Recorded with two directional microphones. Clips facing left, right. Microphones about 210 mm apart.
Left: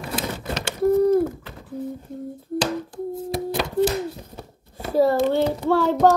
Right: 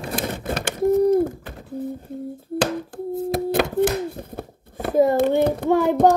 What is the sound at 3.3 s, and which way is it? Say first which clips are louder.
Hands: right 2 dB; 55° right (ahead or behind).